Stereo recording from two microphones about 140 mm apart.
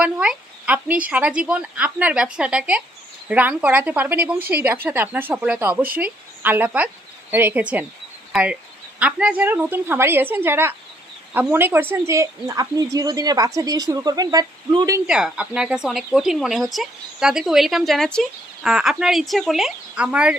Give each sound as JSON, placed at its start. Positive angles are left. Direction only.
{"t": 0.0, "sound": "a woman's voice", "side_deg": -10}
{"t": 15.0, "sound": "speech", "side_deg": -5}